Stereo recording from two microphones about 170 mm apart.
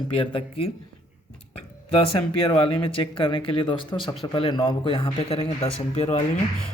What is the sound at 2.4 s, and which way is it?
Speech, 30° left (ahead or behind).